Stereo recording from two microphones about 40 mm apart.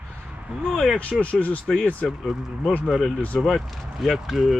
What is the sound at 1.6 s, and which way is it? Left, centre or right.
Speech, left.